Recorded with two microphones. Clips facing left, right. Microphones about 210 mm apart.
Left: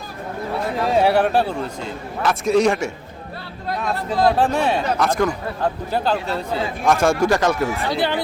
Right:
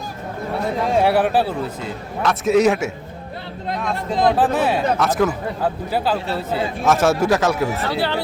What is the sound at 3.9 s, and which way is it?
Speech, 20° right (ahead or behind).